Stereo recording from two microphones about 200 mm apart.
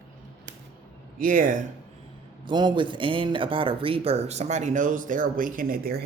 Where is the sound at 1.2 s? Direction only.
45° right (ahead or behind).